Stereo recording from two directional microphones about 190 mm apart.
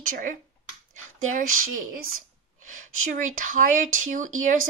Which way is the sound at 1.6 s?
90° right.